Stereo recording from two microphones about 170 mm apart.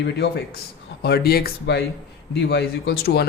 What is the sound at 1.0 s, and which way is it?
A man's voice, 65° left (ahead or behind).